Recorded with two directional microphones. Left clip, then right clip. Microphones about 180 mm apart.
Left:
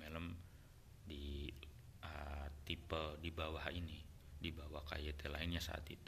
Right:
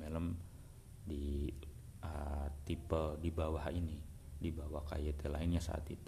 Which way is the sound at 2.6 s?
30° right (ahead or behind).